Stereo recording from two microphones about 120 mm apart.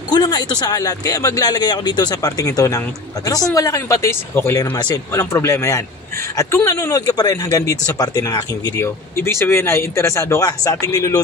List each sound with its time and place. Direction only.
0.1 s speech: 35° left (ahead or behind); by 4.7 s 20° left (ahead or behind)
4.7 s speech: 35° left (ahead or behind)
5.1 s speech: 20° left (ahead or behind)